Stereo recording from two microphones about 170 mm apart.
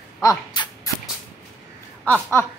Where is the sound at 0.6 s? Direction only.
25° left (ahead or behind).